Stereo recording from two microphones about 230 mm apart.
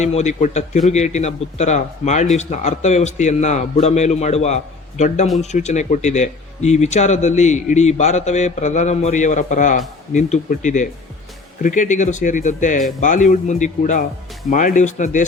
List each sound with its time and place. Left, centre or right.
0.0 s a man's voice: left